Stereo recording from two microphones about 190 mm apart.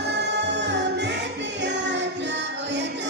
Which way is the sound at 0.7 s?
65° right (ahead or behind).